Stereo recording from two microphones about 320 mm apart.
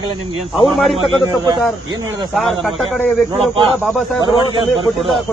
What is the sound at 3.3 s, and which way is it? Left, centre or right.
Speech, centre.